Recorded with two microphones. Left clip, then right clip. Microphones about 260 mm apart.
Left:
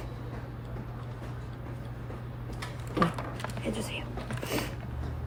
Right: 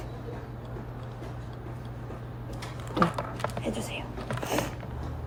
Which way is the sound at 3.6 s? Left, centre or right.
Centre.